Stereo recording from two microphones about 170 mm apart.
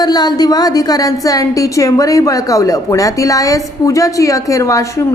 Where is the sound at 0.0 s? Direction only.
25° left (ahead or behind).